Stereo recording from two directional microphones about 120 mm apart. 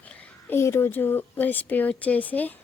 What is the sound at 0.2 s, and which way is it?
A woman's voice, 20° left (ahead or behind).